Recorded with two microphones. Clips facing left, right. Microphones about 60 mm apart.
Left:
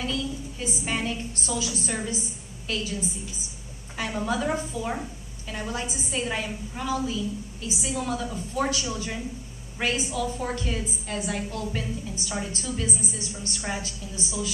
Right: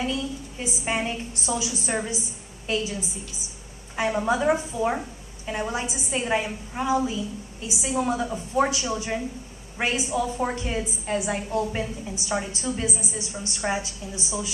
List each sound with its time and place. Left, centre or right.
0.0 s a woman's voice: right